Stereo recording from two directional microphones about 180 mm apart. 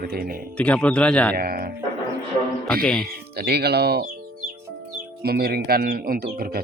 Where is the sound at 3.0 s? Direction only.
60° right (ahead or behind).